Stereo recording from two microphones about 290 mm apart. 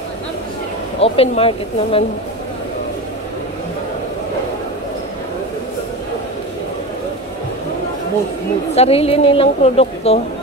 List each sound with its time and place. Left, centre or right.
1.0 s a woman's voice: centre
8.7 s a woman's voice: centre